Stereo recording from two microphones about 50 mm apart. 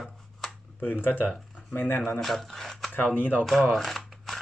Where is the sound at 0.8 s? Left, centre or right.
Left.